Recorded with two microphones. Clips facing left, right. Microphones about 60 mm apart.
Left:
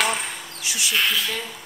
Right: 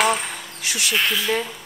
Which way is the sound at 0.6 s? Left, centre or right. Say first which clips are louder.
Right 2 dB; right.